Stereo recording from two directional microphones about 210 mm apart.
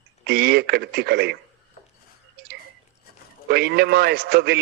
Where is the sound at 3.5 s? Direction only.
50° right (ahead or behind).